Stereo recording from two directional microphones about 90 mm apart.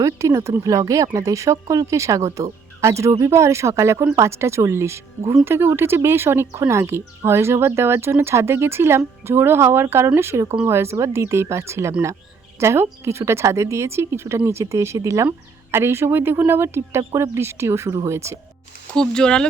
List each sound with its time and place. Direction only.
0.0 s speech: 35° right (ahead or behind)
18.9 s speech: 10° left (ahead or behind)